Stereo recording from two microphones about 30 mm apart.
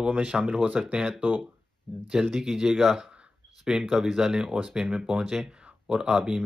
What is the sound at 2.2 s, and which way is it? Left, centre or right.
Speech, centre.